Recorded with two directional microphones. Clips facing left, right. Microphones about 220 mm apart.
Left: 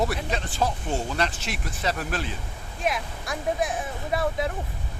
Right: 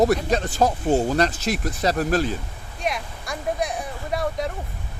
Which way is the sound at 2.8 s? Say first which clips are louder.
Even; centre (ahead or behind).